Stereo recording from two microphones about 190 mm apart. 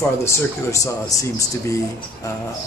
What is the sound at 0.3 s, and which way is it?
Speech, 15° left (ahead or behind).